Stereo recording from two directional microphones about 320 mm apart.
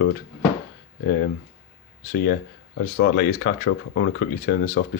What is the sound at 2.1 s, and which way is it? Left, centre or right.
Speech, left.